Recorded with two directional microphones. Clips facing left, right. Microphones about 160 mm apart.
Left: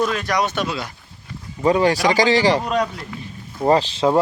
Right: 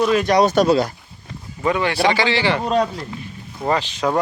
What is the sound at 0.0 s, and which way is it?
Speech, 10° right (ahead or behind).